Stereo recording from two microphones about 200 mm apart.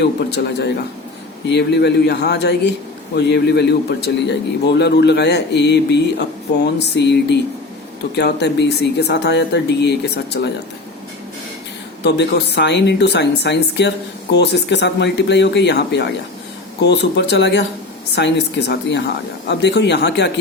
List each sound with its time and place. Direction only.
0.0 s speech: 55° left (ahead or behind)
12.0 s speech: 60° left (ahead or behind)